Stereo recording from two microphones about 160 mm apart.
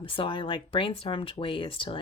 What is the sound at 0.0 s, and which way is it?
Speech, 30° left (ahead or behind).